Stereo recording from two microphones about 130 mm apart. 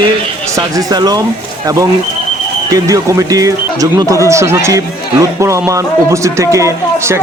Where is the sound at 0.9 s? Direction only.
30° right (ahead or behind).